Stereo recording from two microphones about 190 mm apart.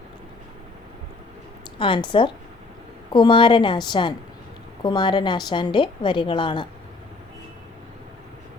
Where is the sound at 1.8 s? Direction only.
25° left (ahead or behind).